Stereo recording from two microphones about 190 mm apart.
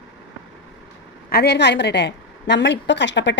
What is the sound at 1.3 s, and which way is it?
A woman's voice, 60° left (ahead or behind).